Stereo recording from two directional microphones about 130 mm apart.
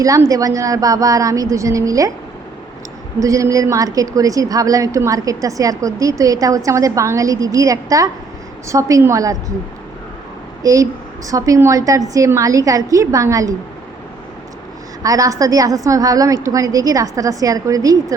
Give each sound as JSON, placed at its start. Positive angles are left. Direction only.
{"t": 0.0, "sound": "a woman's voice", "side_deg": -25}
{"t": 3.2, "sound": "a woman's voice", "side_deg": -25}
{"t": 10.6, "sound": "a woman's voice", "side_deg": -25}
{"t": 15.0, "sound": "a woman's voice", "side_deg": -25}